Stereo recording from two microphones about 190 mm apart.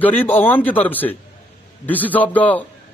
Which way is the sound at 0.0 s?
10° left (ahead or behind).